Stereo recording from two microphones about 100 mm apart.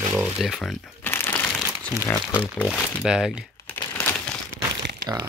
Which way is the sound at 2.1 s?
25° left (ahead or behind).